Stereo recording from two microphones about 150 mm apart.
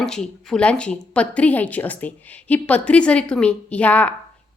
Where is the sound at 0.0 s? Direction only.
5° left (ahead or behind).